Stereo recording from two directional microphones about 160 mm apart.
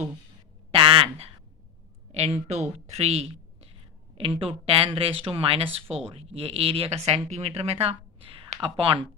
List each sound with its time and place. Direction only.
0.7 s speech: 35° right (ahead or behind)